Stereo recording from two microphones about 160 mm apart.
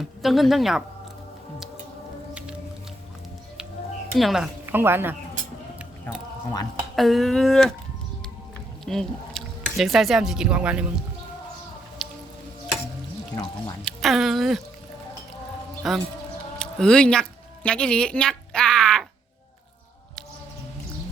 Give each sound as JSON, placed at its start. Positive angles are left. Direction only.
{"t": 0.0, "sound": "speech", "side_deg": 0}
{"t": 4.2, "sound": "speech", "side_deg": 0}
{"t": 4.6, "sound": "a woman's voice", "side_deg": -15}
{"t": 6.9, "sound": "speech", "side_deg": 0}
{"t": 8.8, "sound": "speech", "side_deg": 0}
{"t": 12.0, "sound": "music", "side_deg": 0}
{"t": 13.3, "sound": "speech", "side_deg": 30}
{"t": 13.8, "sound": "speech", "side_deg": 0}
{"t": 15.8, "sound": "speech", "side_deg": 0}
{"t": 16.6, "sound": "a sound", "side_deg": 5}